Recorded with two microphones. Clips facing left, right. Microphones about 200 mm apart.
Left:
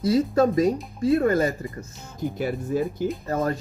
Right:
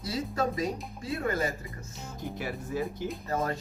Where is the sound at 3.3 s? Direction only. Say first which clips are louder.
Left 5 dB; 45° left (ahead or behind).